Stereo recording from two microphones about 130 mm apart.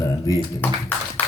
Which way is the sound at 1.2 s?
10° left (ahead or behind).